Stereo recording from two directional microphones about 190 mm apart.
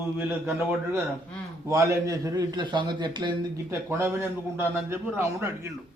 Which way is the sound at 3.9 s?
10° right (ahead or behind).